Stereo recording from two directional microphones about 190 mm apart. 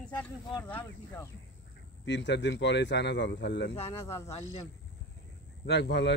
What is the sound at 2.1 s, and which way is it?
Speech, 70° left (ahead or behind).